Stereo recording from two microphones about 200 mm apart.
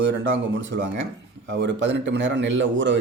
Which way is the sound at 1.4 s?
60° right (ahead or behind).